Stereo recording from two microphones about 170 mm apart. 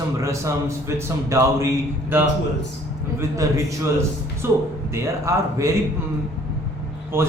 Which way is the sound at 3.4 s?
20° right (ahead or behind).